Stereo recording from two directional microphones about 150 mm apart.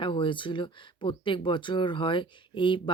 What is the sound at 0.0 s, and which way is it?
Speech, 35° left (ahead or behind).